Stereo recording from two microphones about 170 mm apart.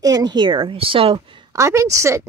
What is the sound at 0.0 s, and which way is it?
A woman's voice, 25° right (ahead or behind).